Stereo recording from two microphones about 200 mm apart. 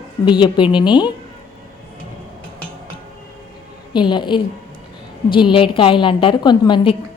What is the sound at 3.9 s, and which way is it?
A woman's voice, 25° left (ahead or behind).